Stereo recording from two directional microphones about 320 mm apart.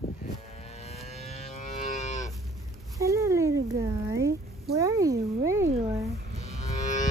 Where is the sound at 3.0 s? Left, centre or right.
Centre.